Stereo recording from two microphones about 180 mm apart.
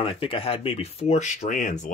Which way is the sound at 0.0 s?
30° left (ahead or behind).